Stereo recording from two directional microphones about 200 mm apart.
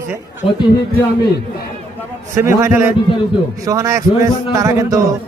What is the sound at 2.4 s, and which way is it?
A man's voice, 15° right (ahead or behind).